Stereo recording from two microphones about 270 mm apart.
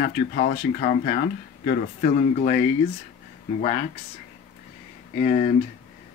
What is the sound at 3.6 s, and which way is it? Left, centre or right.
Speech, left.